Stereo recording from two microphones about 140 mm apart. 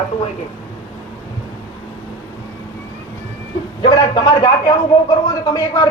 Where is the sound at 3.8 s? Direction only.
35° left (ahead or behind).